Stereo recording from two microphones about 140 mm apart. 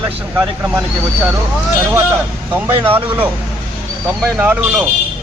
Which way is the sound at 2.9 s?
15° right (ahead or behind).